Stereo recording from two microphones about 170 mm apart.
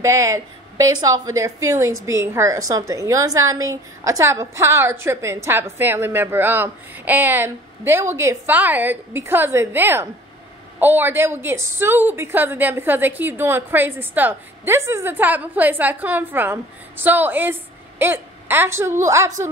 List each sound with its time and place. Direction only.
0.0 s a woman's voice: 20° right (ahead or behind)